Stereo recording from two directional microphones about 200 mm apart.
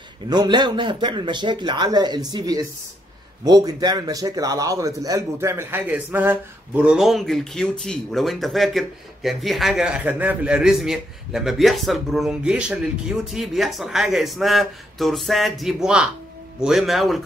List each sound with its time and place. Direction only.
0.3 s a man's voice: 20° right (ahead or behind); by 17.2 s centre (ahead or behind)